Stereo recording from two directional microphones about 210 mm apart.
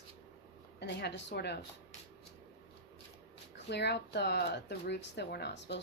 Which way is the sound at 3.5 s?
55° left (ahead or behind).